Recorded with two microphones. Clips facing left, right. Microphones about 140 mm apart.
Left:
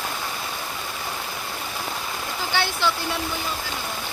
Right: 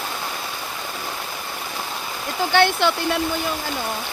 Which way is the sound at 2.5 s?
60° right (ahead or behind).